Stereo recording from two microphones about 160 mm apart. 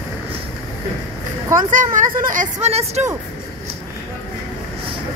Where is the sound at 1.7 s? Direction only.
55° right (ahead or behind).